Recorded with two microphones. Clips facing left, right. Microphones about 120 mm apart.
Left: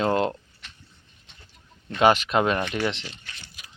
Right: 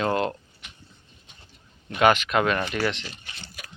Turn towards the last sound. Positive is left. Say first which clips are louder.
# even
turn(degrees=30)  # may be behind; listen again after turning